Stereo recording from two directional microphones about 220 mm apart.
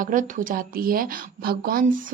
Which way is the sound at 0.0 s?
35° right (ahead or behind).